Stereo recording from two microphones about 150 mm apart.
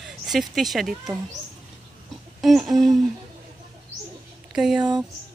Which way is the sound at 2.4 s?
Centre (ahead or behind).